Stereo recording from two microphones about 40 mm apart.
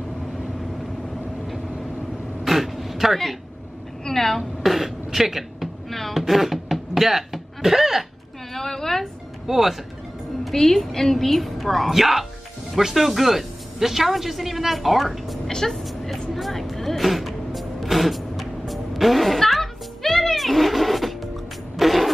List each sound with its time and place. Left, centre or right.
2.4 s vehicle: centre
4.0 s a sound: centre
4.4 s music: centre
5.9 s a sound: centre
8.5 s a woman's voice: centre
9.5 s a woman's voice: centre
10.5 s a woman's voice: centre
15.5 s vehicle: centre
16.3 s speech: centre
17.6 s music: centre